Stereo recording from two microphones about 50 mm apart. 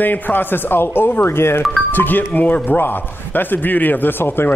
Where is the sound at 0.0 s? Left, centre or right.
Left.